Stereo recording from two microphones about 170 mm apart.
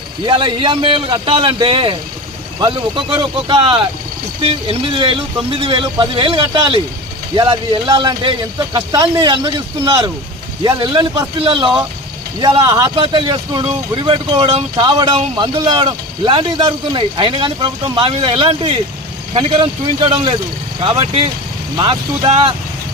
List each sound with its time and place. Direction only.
0.3 s speech: 30° right (ahead or behind)
13.0 s speech: 30° right (ahead or behind)